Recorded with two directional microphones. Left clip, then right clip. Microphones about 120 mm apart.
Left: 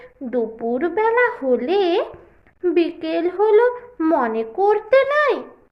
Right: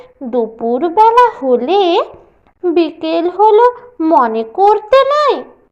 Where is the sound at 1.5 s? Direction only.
25° left (ahead or behind).